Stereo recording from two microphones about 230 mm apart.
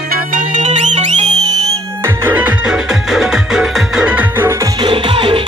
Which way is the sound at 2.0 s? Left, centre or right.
Centre.